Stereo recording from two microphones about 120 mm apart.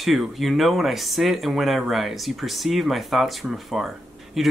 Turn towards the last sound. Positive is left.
turn(degrees=0)  # may be behind; listen again after turning